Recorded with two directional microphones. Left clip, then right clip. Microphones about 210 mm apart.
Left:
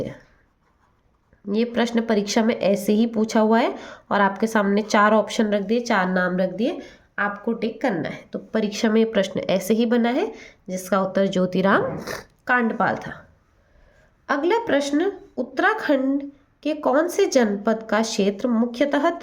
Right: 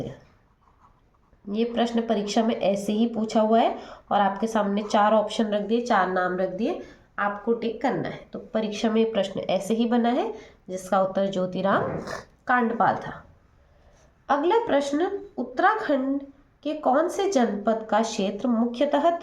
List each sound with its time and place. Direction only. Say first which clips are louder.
1.5 s a woman's voice: left 3 dB; 45° left (ahead or behind)
14.3 s a woman's voice: left 1 dB; 45° left (ahead or behind)